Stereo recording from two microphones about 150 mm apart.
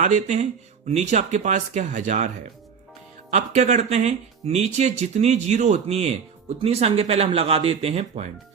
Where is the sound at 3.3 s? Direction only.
50° right (ahead or behind).